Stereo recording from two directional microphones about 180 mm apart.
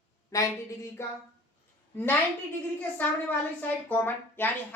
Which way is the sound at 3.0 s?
10° left (ahead or behind).